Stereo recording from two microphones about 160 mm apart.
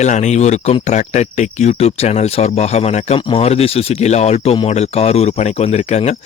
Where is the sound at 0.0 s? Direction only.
45° left (ahead or behind).